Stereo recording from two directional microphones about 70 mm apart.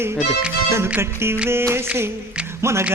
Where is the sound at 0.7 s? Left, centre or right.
Right.